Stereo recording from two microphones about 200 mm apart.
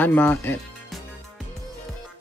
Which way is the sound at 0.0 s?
10° left (ahead or behind).